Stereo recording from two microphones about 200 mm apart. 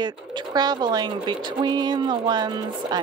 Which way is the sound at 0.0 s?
20° right (ahead or behind).